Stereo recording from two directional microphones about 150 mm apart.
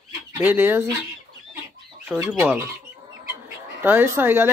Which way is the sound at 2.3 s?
Centre (ahead or behind).